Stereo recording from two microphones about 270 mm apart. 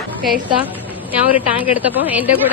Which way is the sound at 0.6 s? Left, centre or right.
Centre.